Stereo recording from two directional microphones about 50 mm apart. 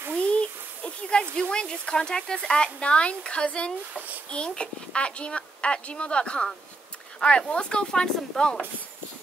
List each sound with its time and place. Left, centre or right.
0.2 s a sound: left
1.3 s speech: centre
3.9 s a child's voice: right
4.3 s speech: left